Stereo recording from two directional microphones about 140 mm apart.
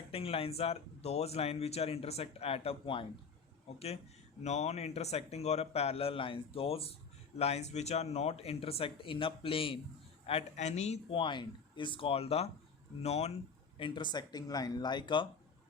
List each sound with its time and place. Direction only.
0.1 s speech: 45° left (ahead or behind)
11.1 s speech: 35° left (ahead or behind)
13.7 s speech: 35° left (ahead or behind)